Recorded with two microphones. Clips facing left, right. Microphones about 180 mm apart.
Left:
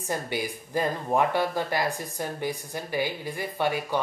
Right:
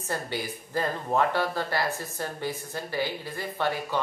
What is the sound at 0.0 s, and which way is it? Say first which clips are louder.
Speech: left 2 dB; 15° left (ahead or behind).